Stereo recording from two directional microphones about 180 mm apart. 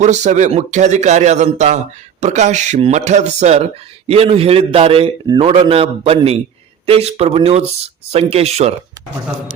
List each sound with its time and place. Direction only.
0.0 s a man's voice: 40° right (ahead or behind)